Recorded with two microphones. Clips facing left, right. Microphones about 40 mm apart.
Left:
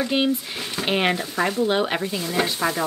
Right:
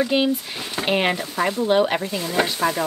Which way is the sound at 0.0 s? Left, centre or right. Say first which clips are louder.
Right 2 dB; centre.